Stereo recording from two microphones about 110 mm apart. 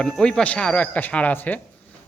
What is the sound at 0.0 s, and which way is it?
A man's voice, 10° left (ahead or behind).